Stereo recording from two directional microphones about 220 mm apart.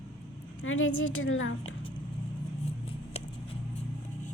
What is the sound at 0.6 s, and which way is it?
Speech, 65° left (ahead or behind).